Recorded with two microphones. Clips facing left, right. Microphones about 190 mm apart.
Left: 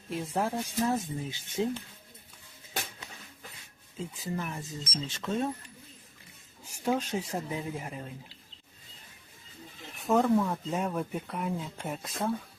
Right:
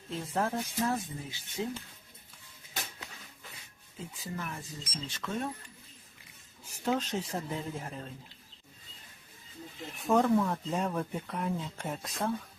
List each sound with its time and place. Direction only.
0.1 s speech: 10° left (ahead or behind)
4.1 s speech: 20° left (ahead or behind)
6.7 s speech: 10° left (ahead or behind)
10.1 s speech: 5° left (ahead or behind)